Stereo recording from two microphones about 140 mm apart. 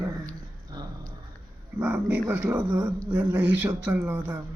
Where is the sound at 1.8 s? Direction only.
10° right (ahead or behind).